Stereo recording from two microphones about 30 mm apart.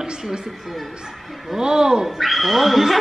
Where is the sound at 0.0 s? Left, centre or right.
Right.